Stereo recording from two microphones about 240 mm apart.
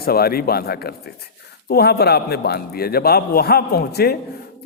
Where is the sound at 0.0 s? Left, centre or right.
Left.